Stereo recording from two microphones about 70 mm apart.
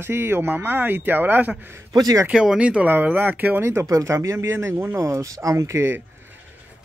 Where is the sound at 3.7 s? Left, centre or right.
Right.